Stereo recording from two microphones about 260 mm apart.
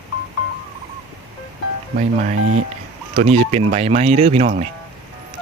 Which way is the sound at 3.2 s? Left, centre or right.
Right.